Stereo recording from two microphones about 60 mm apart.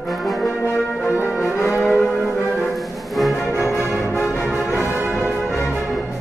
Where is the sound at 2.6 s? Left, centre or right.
Centre.